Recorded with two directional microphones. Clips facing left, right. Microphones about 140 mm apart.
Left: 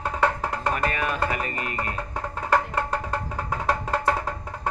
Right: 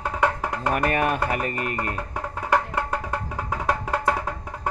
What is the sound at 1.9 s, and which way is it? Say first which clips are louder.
Music: even; 10° right (ahead or behind).